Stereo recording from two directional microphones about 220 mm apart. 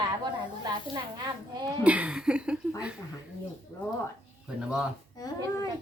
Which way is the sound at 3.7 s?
15° left (ahead or behind).